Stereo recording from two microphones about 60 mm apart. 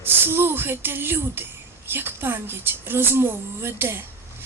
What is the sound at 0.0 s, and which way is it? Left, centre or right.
A woman's voice, right.